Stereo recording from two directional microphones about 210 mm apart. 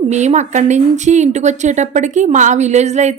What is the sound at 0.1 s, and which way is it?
A woman's voice, 35° right (ahead or behind).